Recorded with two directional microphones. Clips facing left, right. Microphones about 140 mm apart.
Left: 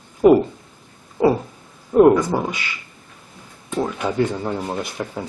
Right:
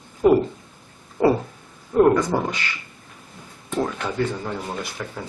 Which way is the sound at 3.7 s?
10° left (ahead or behind).